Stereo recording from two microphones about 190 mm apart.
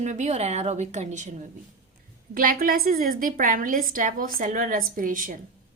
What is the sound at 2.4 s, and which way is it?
A woman's voice, 50° right (ahead or behind).